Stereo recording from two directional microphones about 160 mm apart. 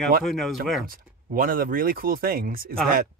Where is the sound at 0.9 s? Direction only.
60° right (ahead or behind).